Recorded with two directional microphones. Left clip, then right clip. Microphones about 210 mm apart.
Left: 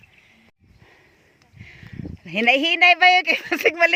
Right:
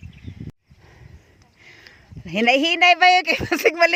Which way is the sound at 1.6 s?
5° right (ahead or behind).